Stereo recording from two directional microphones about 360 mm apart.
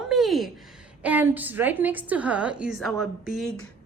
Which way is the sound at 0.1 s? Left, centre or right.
Centre.